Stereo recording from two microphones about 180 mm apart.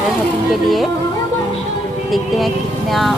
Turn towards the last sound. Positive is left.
turn(degrees=0)  # may be behind; listen again after turning